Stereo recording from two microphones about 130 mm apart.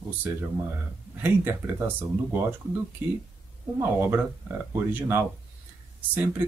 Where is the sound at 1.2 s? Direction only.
15° right (ahead or behind).